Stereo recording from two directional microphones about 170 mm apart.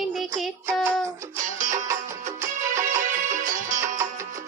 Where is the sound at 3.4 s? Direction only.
50° right (ahead or behind).